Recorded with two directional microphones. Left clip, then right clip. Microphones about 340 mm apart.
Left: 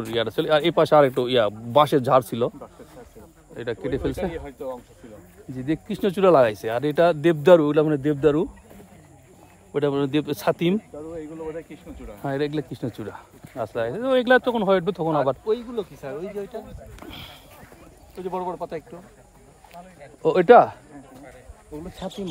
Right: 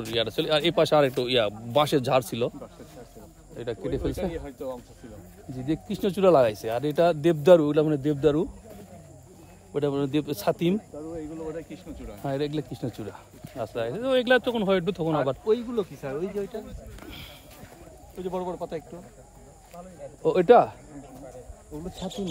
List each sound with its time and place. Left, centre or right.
0.1 s speech: centre
9.8 s speech: left
15.4 s speech: centre
17.0 s a sound: centre
18.1 s speech: left
20.2 s speech: centre